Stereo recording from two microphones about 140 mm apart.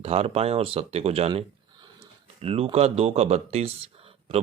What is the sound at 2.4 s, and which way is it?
Speech, 45° right (ahead or behind).